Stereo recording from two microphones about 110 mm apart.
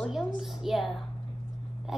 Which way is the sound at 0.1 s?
Centre (ahead or behind).